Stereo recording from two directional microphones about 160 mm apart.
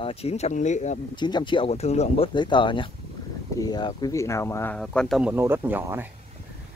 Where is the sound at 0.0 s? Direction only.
40° left (ahead or behind).